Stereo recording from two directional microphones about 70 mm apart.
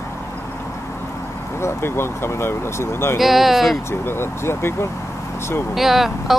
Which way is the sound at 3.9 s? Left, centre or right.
Left.